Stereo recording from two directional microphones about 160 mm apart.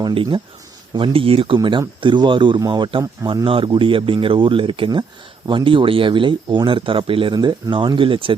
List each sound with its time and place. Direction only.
0.0 s speech: 30° right (ahead or behind)